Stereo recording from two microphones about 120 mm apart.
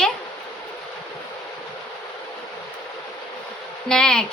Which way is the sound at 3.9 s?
5° left (ahead or behind).